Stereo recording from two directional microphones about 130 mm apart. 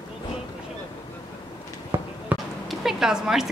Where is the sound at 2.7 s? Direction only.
5° right (ahead or behind).